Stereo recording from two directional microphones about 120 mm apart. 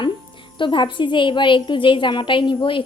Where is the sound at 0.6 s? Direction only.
45° left (ahead or behind).